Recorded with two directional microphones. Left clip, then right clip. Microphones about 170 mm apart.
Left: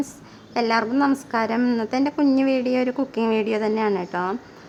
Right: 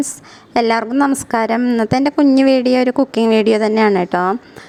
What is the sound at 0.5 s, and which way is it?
A woman's voice, 45° right (ahead or behind).